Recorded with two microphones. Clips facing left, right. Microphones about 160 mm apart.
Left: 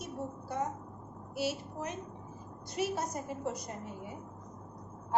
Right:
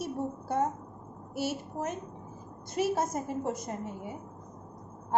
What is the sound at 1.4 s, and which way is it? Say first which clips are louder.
A woman's voice: right 2 dB; 50° right (ahead or behind).